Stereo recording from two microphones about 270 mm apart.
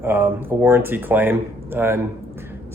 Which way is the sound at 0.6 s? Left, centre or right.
Centre.